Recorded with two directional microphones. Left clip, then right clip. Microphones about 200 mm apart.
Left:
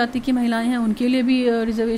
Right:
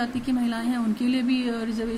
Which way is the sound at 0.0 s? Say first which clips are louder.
Left 6 dB; 35° left (ahead or behind).